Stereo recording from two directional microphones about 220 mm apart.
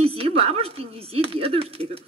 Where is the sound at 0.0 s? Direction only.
25° right (ahead or behind).